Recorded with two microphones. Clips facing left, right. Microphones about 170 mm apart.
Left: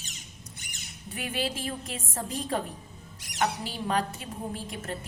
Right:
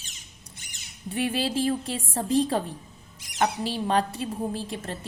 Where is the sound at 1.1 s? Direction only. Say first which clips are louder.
Right 6 dB; 30° right (ahead or behind).